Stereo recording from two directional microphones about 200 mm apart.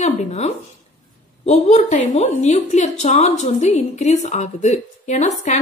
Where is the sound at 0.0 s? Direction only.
35° left (ahead or behind).